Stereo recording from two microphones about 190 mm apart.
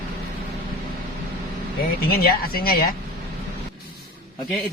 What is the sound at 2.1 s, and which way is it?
Speech, 50° left (ahead or behind).